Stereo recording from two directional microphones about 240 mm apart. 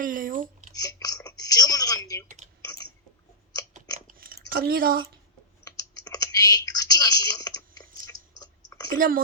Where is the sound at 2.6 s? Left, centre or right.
Centre.